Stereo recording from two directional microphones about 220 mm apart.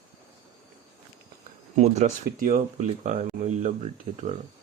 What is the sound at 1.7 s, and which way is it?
A man's voice, 30° right (ahead or behind).